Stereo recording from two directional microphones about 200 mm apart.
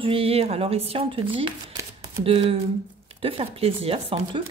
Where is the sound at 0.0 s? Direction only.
30° right (ahead or behind).